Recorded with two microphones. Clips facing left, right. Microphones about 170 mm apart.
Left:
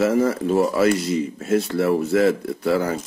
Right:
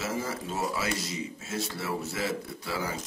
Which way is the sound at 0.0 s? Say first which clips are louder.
Left 14 dB; 60° left (ahead or behind).